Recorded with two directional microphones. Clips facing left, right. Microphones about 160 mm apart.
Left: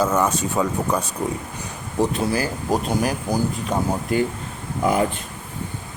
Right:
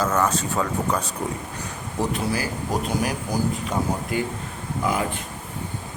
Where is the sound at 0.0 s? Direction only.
10° left (ahead or behind).